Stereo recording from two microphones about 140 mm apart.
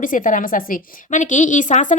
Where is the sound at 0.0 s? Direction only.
75° left (ahead or behind).